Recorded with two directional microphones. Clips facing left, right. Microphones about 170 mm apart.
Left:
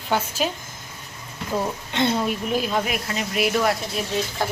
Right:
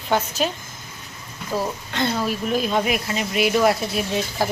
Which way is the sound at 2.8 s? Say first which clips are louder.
Right 3 dB; centre (ahead or behind).